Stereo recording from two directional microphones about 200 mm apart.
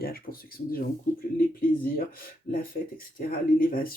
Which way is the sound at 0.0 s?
50° left (ahead or behind).